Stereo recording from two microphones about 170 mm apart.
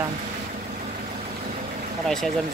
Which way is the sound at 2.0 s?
Centre (ahead or behind).